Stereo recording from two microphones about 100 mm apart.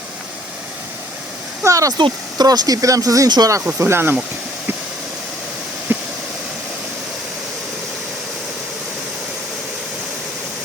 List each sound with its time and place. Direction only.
1.6 s speech: 35° right (ahead or behind)
2.0 s speech: 45° right (ahead or behind)
3.8 s speech: 25° right (ahead or behind)
5.9 s vehicle: 20° right (ahead or behind)